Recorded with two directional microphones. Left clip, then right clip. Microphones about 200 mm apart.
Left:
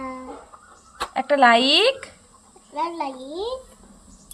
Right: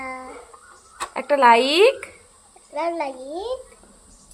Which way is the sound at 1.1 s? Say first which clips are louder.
Right 1 dB; 10° right (ahead or behind).